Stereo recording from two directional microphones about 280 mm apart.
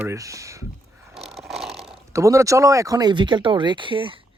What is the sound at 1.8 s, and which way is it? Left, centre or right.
Speech, centre.